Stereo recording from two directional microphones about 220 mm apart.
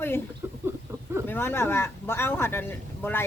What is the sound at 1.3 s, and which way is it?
Speech, 10° left (ahead or behind).